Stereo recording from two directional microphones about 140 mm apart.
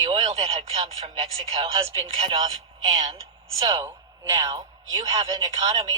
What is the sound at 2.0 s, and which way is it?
Speech, 40° right (ahead or behind).